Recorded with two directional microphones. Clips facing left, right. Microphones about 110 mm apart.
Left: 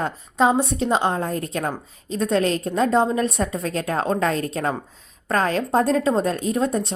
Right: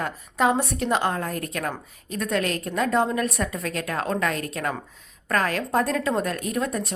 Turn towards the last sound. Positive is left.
turn(degrees=25)  # may be behind; listen again after turning